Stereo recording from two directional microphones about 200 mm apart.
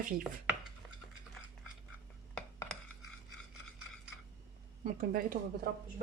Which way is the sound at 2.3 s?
5° left (ahead or behind).